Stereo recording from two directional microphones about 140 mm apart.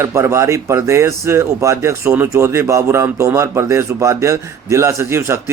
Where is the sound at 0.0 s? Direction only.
20° right (ahead or behind).